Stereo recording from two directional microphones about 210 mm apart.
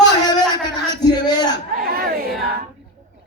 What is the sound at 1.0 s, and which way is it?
Speech, 20° left (ahead or behind).